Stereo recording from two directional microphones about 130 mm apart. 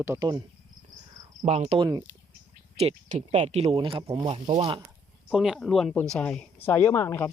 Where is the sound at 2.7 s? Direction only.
55° right (ahead or behind).